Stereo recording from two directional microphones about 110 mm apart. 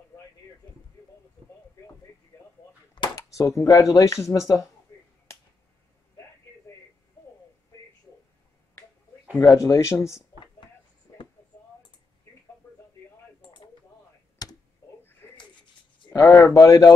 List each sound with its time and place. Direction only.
3.2 s speech: 30° left (ahead or behind)
9.4 s speech: 30° left (ahead or behind)
13.4 s a sound: 45° left (ahead or behind)
14.4 s computer keyboard: 35° left (ahead or behind)
14.8 s a sound: 30° left (ahead or behind)
16.2 s a man's voice: 25° left (ahead or behind)